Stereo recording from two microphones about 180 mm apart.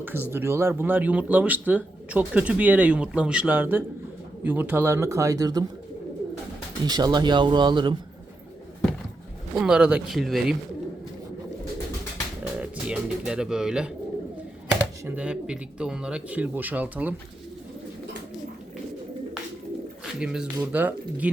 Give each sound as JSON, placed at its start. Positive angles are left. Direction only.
{"t": 0.0, "sound": "speech", "side_deg": -10}
{"t": 6.8, "sound": "speech", "side_deg": -20}
{"t": 9.6, "sound": "speech", "side_deg": -5}
{"t": 12.5, "sound": "bird", "side_deg": -5}
{"t": 15.0, "sound": "speech", "side_deg": -10}
{"t": 20.1, "sound": "speech", "side_deg": -5}